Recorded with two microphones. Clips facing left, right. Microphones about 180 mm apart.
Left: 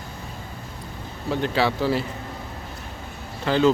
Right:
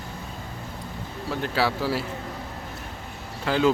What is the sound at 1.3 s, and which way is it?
Speech, 5° right (ahead or behind).